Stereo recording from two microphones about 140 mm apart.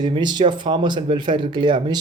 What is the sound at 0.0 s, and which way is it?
Speech, 30° right (ahead or behind).